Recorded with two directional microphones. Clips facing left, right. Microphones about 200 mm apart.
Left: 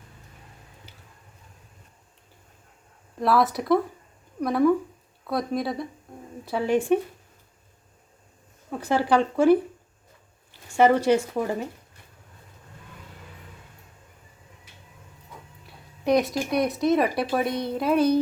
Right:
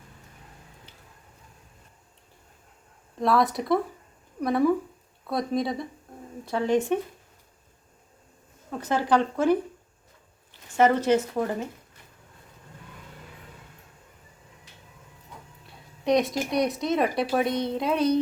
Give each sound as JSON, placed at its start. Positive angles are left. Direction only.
{"t": 3.2, "sound": "speech", "side_deg": 0}
{"t": 8.8, "sound": "speech", "side_deg": 10}
{"t": 10.8, "sound": "speech", "side_deg": 10}
{"t": 15.6, "sound": "a sound", "side_deg": 0}
{"t": 16.5, "sound": "speech", "side_deg": 0}